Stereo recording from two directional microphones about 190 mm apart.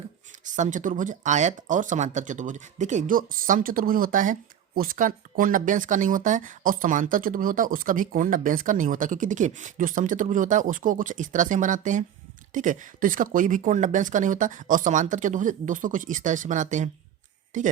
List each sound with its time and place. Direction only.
0.4 s speech: 40° right (ahead or behind)